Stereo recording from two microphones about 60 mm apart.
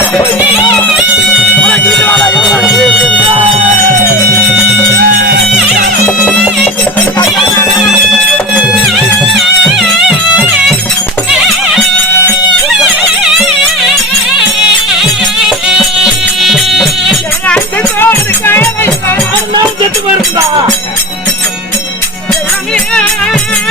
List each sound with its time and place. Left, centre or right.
1.8 s music: left
2.4 s music: centre
9.4 s music: centre
12.6 s music: centre
15.4 s music: centre
18.0 s music: left